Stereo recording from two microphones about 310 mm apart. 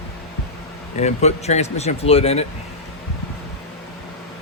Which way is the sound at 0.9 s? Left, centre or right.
Left.